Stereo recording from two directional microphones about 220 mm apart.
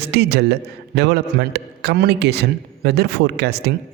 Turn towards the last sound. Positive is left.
turn(degrees=-45)  # may be behind; listen again after turning